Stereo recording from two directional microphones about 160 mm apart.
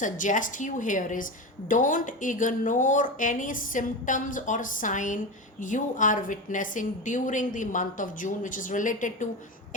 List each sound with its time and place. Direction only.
0.0 s a woman's voice: 55° left (ahead or behind)